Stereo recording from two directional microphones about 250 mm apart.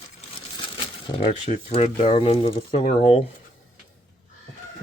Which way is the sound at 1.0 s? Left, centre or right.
Left.